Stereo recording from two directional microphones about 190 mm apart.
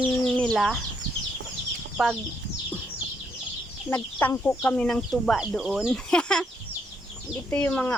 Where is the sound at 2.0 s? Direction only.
Centre (ahead or behind).